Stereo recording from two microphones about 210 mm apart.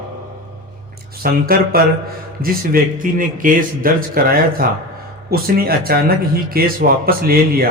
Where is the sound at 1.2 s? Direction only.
45° right (ahead or behind).